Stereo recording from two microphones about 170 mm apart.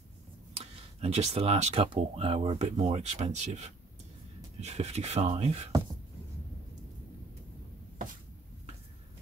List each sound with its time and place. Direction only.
0.6 s speech: 40° right (ahead or behind)